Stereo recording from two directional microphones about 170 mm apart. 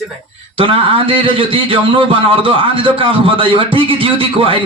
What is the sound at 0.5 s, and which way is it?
A man's voice, 30° right (ahead or behind).